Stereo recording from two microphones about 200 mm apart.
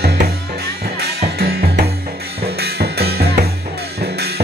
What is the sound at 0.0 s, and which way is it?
Music, 55° right (ahead or behind).